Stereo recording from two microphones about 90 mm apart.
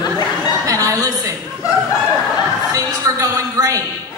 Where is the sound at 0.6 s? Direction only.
35° right (ahead or behind).